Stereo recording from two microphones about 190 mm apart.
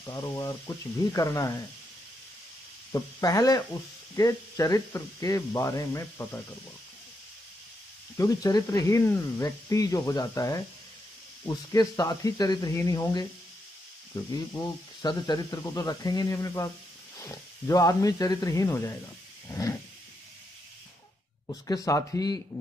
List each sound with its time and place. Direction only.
0.0 s speech: 15° left (ahead or behind)
2.9 s speech: 20° left (ahead or behind)
8.2 s speech: 20° left (ahead or behind)
19.4 s vehicle: 15° left (ahead or behind)
21.5 s speech: 20° left (ahead or behind)